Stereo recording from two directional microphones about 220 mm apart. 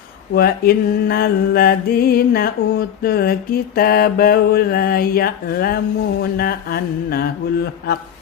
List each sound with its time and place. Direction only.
0.3 s mantra: 45° left (ahead or behind)